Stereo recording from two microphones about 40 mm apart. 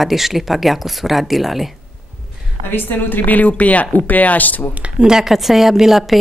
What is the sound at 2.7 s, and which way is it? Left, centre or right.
Speech, left.